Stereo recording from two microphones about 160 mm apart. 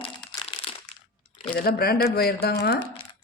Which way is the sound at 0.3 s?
35° left (ahead or behind).